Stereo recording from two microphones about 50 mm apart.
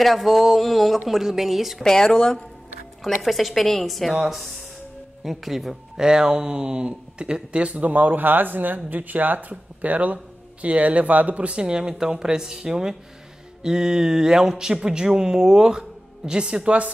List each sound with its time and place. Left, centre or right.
0.0 s speech: centre
1.8 s speech: centre
3.0 s speech: centre
6.0 s speech: centre